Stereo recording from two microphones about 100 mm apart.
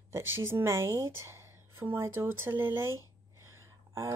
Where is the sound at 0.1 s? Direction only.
25° right (ahead or behind).